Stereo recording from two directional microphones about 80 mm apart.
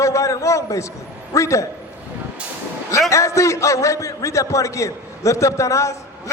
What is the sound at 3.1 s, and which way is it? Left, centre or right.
A man's voice, left.